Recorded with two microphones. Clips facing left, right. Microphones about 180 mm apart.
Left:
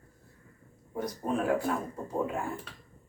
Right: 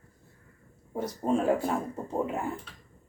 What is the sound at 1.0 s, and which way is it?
Speech, 25° right (ahead or behind).